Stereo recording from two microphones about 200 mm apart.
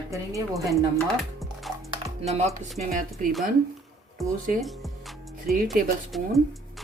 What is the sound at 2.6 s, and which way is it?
Speech, 35° right (ahead or behind).